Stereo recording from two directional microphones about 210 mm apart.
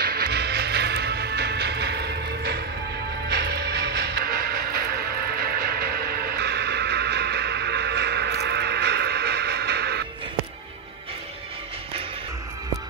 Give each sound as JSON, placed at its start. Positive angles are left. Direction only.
{"t": 0.0, "sound": "music", "side_deg": -45}